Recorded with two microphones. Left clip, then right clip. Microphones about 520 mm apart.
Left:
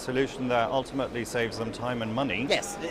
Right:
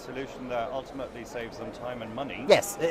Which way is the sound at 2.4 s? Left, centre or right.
Right.